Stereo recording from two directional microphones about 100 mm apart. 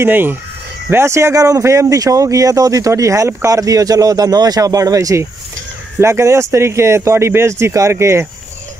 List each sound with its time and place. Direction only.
0.0 s speech: 20° right (ahead or behind)